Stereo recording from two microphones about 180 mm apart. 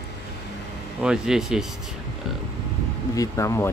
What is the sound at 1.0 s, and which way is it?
Speech, 5° right (ahead or behind).